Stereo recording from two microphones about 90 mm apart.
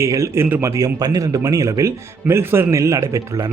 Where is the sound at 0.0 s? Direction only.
35° right (ahead or behind).